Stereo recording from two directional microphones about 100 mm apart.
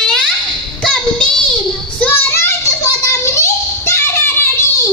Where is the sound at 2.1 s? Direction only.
25° left (ahead or behind).